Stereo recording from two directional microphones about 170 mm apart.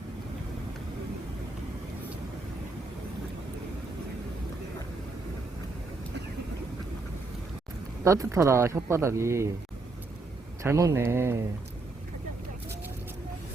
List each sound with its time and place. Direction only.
8.0 s speech: 15° right (ahead or behind)
10.6 s speech: 20° right (ahead or behind)